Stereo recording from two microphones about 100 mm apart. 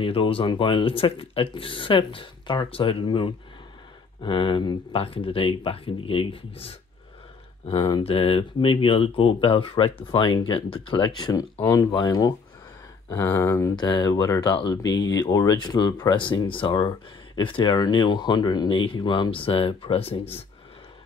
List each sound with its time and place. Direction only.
0.0 s speech: 65° left (ahead or behind)
7.7 s speech: 45° left (ahead or behind)
8.0 s speech: 70° left (ahead or behind); by 11.3 s 50° left (ahead or behind)
11.3 s speech: 30° left (ahead or behind)
11.9 s speech: 45° left (ahead or behind)
13.1 s speech: 25° left (ahead or behind)
13.7 s speech: 45° left (ahead or behind); by 20.4 s 80° left